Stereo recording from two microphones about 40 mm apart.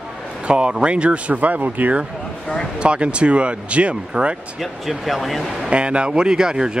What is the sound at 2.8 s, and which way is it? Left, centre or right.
Speech, right.